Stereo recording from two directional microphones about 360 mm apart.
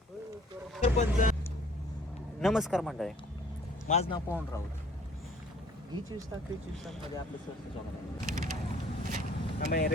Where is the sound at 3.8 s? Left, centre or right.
Centre.